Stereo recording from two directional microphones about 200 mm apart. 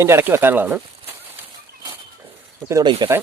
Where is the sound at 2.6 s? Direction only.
15° right (ahead or behind).